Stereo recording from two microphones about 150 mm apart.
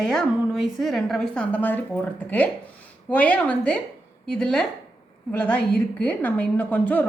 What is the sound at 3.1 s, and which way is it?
A woman's voice, 10° left (ahead or behind).